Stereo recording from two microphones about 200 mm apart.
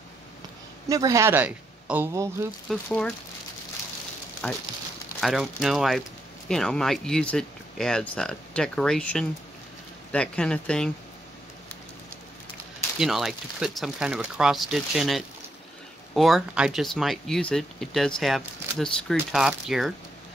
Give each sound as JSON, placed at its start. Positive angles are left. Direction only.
{"t": 0.8, "sound": "a man's voice", "side_deg": -15}
{"t": 2.7, "sound": "speech", "side_deg": 5}
{"t": 4.4, "sound": "speech", "side_deg": 5}
{"t": 13.0, "sound": "speech", "side_deg": 0}